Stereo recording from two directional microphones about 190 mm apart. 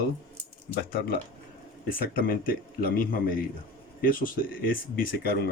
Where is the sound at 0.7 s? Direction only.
50° left (ahead or behind).